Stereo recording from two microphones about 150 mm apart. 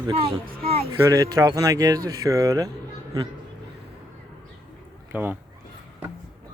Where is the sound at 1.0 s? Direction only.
20° right (ahead or behind).